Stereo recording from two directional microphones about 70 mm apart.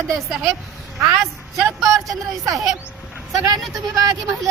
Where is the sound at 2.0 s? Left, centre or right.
Right.